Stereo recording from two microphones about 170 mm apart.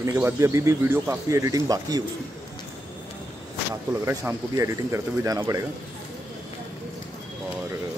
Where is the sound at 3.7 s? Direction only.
15° right (ahead or behind).